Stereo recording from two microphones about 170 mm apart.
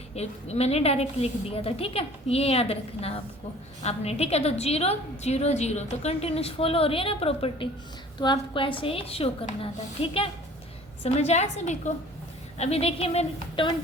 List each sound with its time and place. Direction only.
0.2 s a woman's voice: 40° left (ahead or behind)